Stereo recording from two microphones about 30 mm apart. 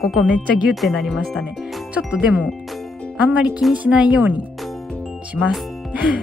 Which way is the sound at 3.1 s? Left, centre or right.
Right.